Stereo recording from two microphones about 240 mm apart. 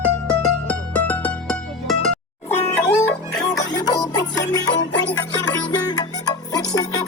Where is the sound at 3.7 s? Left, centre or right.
Centre.